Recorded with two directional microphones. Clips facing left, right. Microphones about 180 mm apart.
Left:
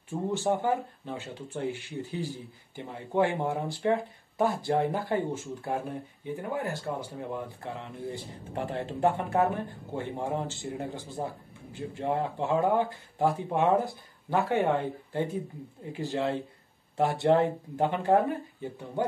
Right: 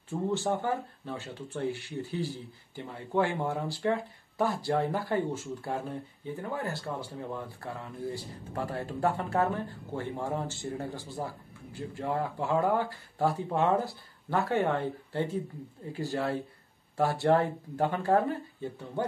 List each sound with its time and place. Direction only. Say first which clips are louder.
0.1 s speech: left 1 dB; 15° left (ahead or behind)